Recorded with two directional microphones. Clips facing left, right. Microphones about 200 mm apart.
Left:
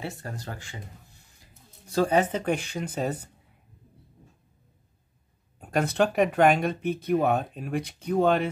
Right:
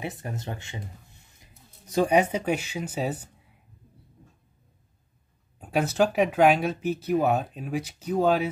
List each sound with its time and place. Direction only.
0.0 s speech: 20° right (ahead or behind)
5.6 s speech: 5° right (ahead or behind)